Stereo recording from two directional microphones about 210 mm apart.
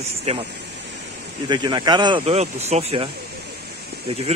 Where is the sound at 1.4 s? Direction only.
20° right (ahead or behind).